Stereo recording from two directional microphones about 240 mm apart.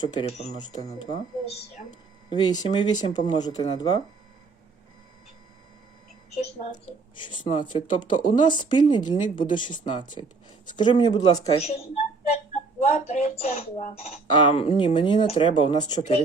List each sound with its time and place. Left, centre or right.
0.0 s speech: left
2.3 s speech: centre
6.3 s speech: left